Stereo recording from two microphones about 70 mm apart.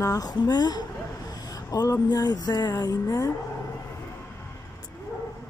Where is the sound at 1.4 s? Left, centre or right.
Left.